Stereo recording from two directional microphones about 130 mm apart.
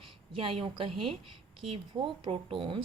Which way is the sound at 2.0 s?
45° right (ahead or behind).